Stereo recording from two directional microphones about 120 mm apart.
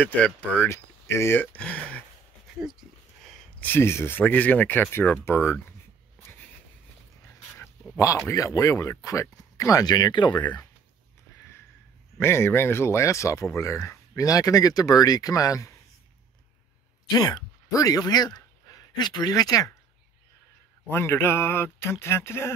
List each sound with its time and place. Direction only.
0.0 s speech: 10° left (ahead or behind)
0.7 s speech: 20° left (ahead or behind)
3.3 s a sound: 5° left (ahead or behind)
3.6 s speech: 20° left (ahead or behind)
6.2 s a sound: 15° left (ahead or behind)
8.3 s speech: 25° left (ahead or behind)
12.2 s speech: 20° left (ahead or behind)
17.1 s speech: 35° left (ahead or behind)
20.9 s speech: 20° left (ahead or behind)